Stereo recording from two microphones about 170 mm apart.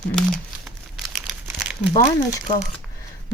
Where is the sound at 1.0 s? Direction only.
Centre (ahead or behind).